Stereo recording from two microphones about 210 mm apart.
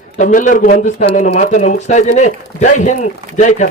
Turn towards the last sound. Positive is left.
turn(degrees=35)  # may be behind; listen again after turning